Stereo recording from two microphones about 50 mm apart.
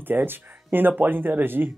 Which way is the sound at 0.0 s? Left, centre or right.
Right.